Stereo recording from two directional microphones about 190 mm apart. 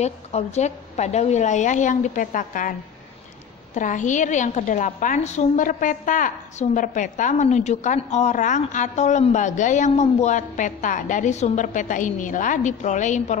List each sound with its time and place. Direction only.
0.0 s a woman's voice: 35° left (ahead or behind)
3.7 s a woman's voice: 40° left (ahead or behind)